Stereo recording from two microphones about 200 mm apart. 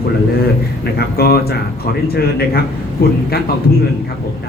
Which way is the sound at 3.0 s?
50° left (ahead or behind).